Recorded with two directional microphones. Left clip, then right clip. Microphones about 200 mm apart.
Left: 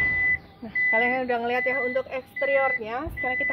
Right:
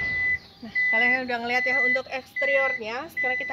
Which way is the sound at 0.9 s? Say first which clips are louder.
Right 3 dB; 20° left (ahead or behind).